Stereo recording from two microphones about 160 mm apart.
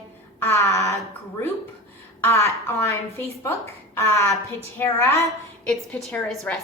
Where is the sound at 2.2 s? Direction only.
15° left (ahead or behind).